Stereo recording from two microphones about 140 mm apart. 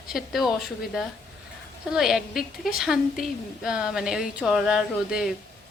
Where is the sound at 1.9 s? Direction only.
5° right (ahead or behind).